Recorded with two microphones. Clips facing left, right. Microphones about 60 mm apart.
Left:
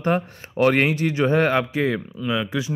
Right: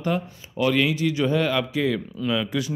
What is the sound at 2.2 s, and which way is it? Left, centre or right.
Speech, centre.